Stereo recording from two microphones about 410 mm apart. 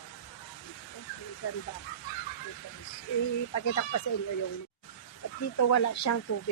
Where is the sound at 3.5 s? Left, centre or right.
Left.